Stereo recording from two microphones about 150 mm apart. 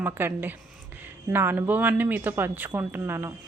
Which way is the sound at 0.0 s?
15° right (ahead or behind).